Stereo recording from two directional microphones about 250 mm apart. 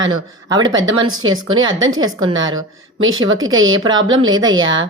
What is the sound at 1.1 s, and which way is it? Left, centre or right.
Speech, right.